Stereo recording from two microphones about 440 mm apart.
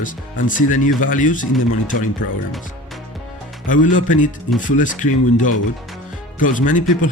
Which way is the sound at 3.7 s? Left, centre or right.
Centre.